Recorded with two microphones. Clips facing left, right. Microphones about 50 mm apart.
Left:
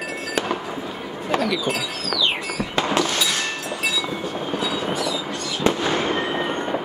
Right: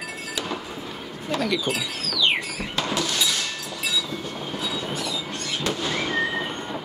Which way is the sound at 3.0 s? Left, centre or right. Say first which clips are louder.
Left 4 dB; left.